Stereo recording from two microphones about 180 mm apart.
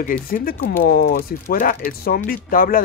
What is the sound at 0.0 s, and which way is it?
Speech, 50° left (ahead or behind).